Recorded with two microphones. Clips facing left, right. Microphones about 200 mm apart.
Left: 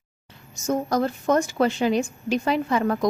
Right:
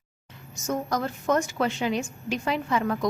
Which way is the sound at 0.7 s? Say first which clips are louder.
Left 5 dB; 30° left (ahead or behind).